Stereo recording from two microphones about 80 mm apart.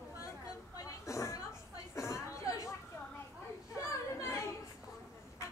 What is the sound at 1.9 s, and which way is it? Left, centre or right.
Chatter, left.